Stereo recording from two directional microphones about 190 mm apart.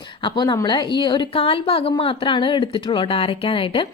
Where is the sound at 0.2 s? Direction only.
25° left (ahead or behind).